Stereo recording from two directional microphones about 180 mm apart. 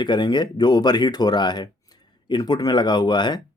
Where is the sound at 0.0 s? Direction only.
25° left (ahead or behind).